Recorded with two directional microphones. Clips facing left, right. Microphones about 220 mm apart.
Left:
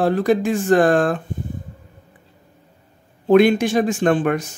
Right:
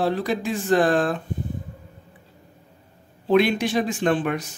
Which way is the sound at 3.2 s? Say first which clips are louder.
Left 6 dB; 50° left (ahead or behind).